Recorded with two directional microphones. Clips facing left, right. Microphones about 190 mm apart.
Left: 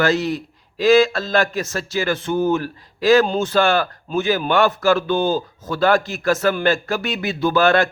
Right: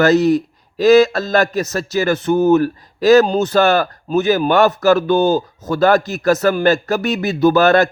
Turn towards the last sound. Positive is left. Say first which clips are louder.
# right 4 dB
turn(degrees=-40)  # may be behind; listen again after turning